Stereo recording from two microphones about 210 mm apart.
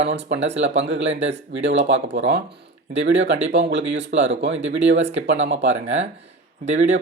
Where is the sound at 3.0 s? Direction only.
55° right (ahead or behind).